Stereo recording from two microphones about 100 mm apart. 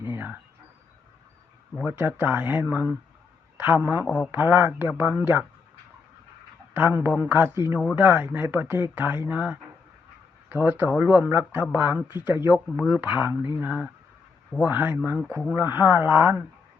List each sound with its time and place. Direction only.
0.0 s a sound: 15° right (ahead or behind)
1.8 s a man's voice: 15° right (ahead or behind)
6.7 s a man's voice: 15° right (ahead or behind)
12.2 s a man's voice: 25° right (ahead or behind)
12.9 s a man's voice: 15° right (ahead or behind)